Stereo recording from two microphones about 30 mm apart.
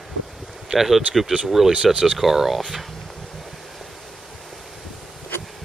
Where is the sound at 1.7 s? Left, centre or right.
Right.